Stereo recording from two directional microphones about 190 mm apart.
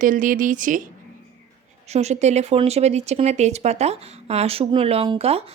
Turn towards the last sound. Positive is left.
turn(degrees=-30)  # may be behind; listen again after turning